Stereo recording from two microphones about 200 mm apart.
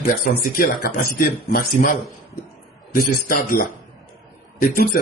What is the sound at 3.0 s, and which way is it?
Speech, 45° left (ahead or behind).